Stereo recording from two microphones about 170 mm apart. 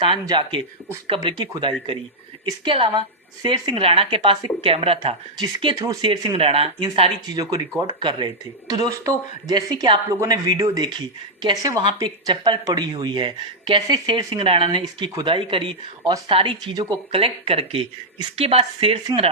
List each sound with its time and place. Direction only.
0.0 s speech: 30° right (ahead or behind)
5.6 s speech: 20° right (ahead or behind)